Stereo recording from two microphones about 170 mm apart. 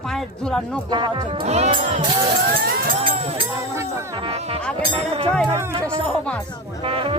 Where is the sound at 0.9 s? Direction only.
30° right (ahead or behind).